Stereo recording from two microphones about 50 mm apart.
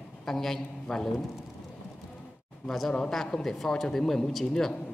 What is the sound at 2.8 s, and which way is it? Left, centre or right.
Speech, left.